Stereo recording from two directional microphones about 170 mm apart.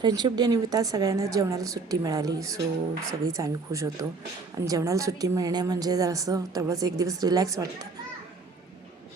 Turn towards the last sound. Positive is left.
turn(degrees=-20)  # may be behind; listen again after turning